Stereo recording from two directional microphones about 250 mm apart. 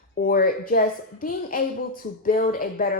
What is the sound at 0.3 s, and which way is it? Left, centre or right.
A woman's voice, left.